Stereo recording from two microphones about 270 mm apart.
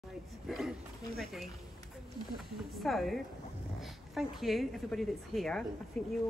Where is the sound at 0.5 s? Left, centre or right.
Centre.